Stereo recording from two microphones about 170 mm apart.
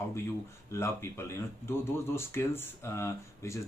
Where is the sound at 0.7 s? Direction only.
15° left (ahead or behind).